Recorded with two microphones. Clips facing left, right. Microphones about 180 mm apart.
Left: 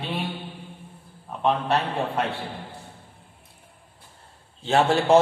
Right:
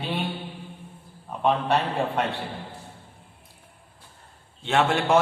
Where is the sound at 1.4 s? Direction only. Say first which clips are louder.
Even; centre (ahead or behind).